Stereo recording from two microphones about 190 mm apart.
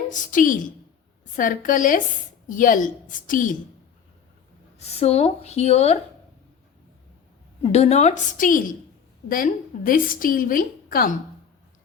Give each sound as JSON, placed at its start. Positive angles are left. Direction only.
{"t": 0.1, "sound": "a woman's voice", "side_deg": 45}
{"t": 4.8, "sound": "speech", "side_deg": 35}
{"t": 7.6, "sound": "a woman's voice", "side_deg": 35}